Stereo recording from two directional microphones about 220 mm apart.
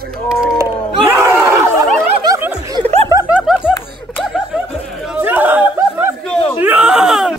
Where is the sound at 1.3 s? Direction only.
15° right (ahead or behind).